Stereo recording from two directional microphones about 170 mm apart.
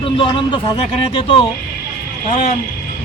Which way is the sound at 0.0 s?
30° left (ahead or behind).